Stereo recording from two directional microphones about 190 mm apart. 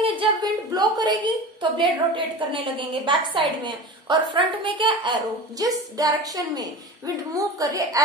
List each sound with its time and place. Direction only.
0.0 s a woman's voice: 25° right (ahead or behind)